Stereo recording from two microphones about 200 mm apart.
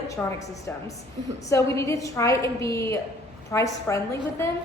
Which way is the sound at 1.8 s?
15° left (ahead or behind).